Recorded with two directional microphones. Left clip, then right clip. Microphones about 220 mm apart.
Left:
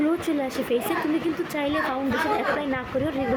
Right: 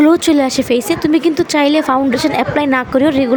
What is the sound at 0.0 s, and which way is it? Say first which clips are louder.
A woman's voice: right 14 dB; 45° right (ahead or behind).